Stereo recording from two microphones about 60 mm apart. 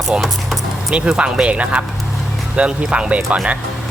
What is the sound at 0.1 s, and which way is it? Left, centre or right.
Speech, centre.